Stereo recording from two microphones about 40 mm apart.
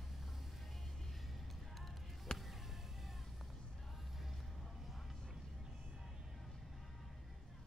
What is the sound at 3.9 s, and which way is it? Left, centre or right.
Music, centre.